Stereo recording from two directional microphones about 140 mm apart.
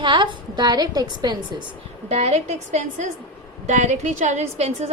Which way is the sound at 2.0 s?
50° right (ahead or behind).